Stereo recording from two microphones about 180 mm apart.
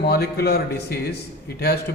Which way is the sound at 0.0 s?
65° left (ahead or behind).